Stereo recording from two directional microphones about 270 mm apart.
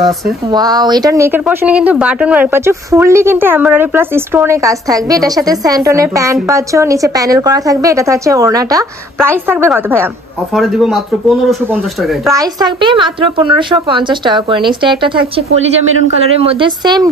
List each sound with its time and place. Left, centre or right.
0.0 s speech: centre
12.3 s speech: centre